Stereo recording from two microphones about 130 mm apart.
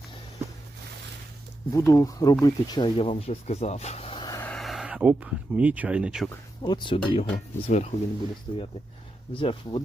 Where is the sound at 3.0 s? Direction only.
50° left (ahead or behind).